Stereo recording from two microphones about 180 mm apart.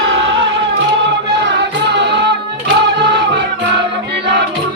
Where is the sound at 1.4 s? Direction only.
75° right (ahead or behind).